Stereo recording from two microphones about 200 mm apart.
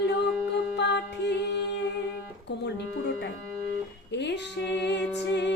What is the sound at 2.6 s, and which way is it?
Music, 60° left (ahead or behind).